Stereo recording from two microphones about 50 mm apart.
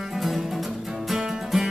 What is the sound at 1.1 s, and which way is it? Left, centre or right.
Music, centre.